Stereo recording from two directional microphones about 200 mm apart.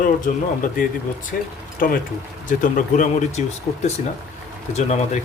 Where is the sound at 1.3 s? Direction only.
50° left (ahead or behind).